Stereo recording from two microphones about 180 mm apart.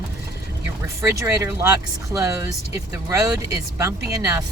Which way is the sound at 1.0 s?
15° right (ahead or behind).